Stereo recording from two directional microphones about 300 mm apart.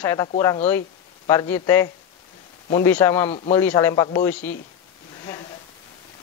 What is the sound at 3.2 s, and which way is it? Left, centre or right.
Speech, centre.